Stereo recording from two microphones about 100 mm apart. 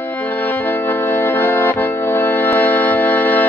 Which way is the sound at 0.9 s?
25° left (ahead or behind).